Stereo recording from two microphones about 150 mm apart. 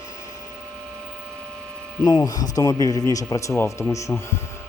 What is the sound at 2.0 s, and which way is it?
A man's voice, 25° left (ahead or behind).